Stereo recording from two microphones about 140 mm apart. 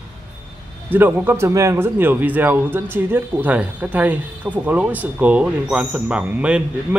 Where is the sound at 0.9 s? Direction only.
15° right (ahead or behind).